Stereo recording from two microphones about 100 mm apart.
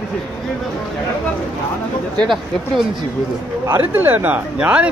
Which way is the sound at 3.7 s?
20° right (ahead or behind).